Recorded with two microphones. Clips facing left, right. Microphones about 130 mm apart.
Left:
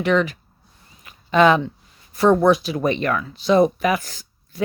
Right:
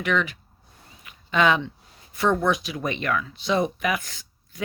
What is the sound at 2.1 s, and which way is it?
Speech, 40° left (ahead or behind).